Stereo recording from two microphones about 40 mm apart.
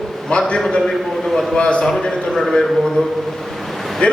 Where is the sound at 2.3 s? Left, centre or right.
Centre.